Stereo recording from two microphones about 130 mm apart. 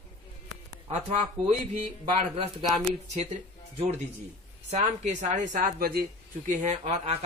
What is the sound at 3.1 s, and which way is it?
Speech, 60° right (ahead or behind).